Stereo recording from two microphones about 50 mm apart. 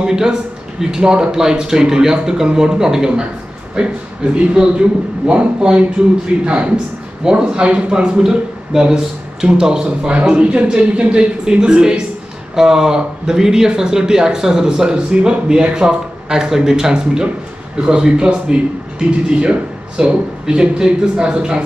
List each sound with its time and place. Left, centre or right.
0.0 s a man's voice: centre